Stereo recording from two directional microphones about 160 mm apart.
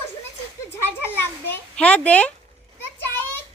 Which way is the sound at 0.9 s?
15° left (ahead or behind).